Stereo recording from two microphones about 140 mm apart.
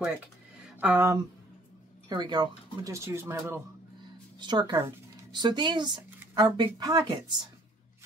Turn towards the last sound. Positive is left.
turn(degrees=-30)  # may be behind; listen again after turning